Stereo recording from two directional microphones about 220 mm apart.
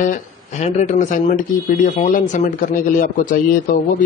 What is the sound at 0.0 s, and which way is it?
A man's voice, 35° left (ahead or behind).